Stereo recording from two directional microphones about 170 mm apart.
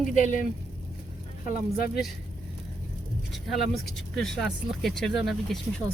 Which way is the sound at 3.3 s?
Centre (ahead or behind).